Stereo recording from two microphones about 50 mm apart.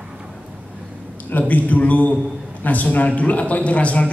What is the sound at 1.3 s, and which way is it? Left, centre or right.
A man's voice, left.